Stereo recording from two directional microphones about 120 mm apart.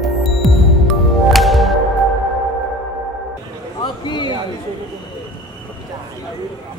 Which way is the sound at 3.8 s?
40° left (ahead or behind).